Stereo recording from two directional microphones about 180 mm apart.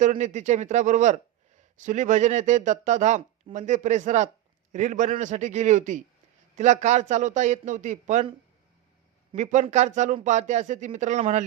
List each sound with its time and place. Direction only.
0.0 s speech: 40° right (ahead or behind)
9.3 s speech: 40° right (ahead or behind)